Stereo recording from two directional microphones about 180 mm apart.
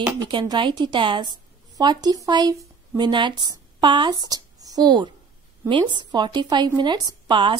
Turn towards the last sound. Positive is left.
turn(degrees=-25)  # may be behind; listen again after turning